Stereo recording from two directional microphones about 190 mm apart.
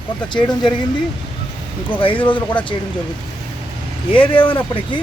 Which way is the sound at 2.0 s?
25° left (ahead or behind).